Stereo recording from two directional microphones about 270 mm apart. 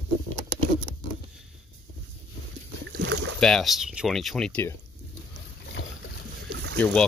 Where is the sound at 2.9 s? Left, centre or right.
Right.